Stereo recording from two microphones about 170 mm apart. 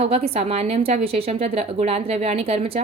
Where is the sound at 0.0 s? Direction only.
35° right (ahead or behind).